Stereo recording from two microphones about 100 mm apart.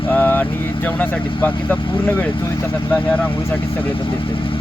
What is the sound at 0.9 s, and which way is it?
Speech, 15° left (ahead or behind).